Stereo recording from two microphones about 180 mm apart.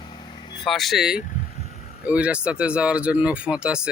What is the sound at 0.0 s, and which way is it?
Vehicle, 25° left (ahead or behind).